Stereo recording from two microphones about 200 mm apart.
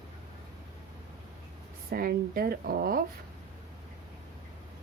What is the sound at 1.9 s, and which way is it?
A woman's voice, 45° right (ahead or behind).